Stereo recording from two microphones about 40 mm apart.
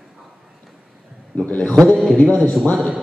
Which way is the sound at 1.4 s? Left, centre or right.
Left.